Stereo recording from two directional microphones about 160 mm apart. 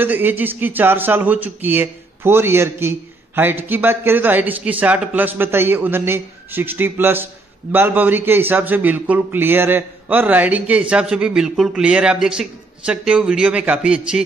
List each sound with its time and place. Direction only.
0.0 s speech: 10° right (ahead or behind)